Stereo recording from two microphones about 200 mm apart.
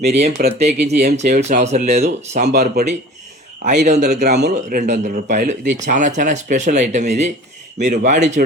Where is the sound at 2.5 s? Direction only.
55° right (ahead or behind).